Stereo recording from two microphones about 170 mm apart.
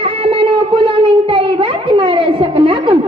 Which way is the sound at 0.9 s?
30° right (ahead or behind).